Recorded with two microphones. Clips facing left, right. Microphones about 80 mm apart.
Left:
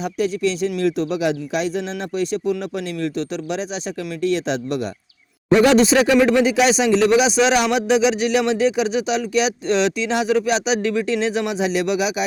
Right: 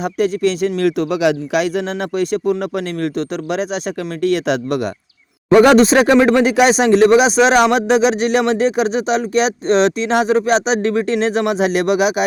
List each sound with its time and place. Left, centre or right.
0.0 s a man's voice: right